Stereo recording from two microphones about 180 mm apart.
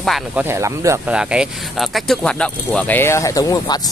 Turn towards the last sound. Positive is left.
turn(degrees=20)  # may be behind; listen again after turning